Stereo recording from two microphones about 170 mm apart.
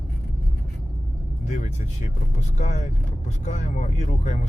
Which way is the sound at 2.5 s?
45° left (ahead or behind).